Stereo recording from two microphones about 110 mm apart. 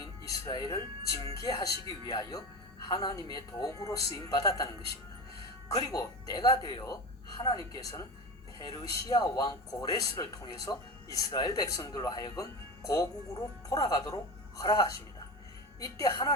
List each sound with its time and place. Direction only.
0.0 s speech: 35° left (ahead or behind)